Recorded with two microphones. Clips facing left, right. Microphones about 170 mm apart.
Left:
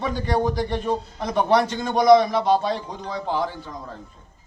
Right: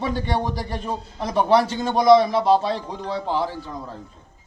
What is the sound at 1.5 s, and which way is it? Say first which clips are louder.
A man's voice: right 2 dB; 30° right (ahead or behind).